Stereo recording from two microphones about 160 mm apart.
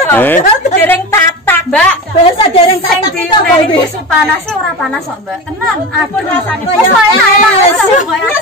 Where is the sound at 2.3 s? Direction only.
35° left (ahead or behind).